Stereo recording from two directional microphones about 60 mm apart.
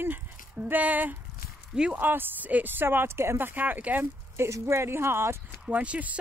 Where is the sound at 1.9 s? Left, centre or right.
Right.